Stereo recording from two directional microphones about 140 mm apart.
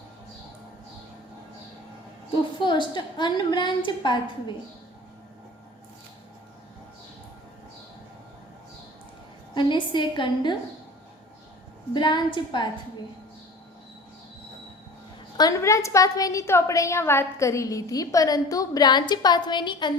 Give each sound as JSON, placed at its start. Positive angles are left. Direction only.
{"t": 2.3, "sound": "a woman's voice", "side_deg": 35}
{"t": 9.6, "sound": "a woman's voice", "side_deg": 35}
{"t": 11.9, "sound": "a woman's voice", "side_deg": 35}
{"t": 15.4, "sound": "a woman's voice", "side_deg": 25}